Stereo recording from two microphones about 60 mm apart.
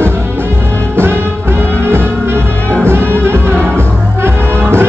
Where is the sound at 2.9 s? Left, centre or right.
Right.